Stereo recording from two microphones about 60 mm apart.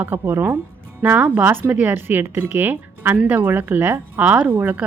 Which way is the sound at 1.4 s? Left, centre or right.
Right.